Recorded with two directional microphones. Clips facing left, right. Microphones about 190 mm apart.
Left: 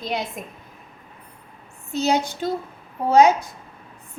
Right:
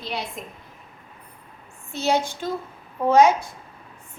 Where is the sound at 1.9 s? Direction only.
40° left (ahead or behind).